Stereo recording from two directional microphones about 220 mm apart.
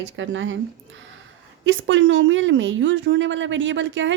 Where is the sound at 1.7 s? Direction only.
60° right (ahead or behind).